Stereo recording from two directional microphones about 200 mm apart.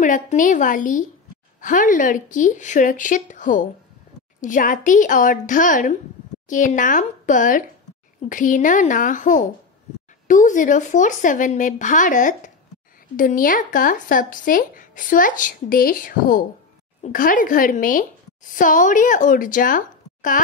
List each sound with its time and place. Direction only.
0.0 s a woman's voice: 40° left (ahead or behind)